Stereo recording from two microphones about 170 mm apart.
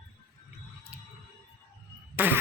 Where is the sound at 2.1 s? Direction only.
10° right (ahead or behind).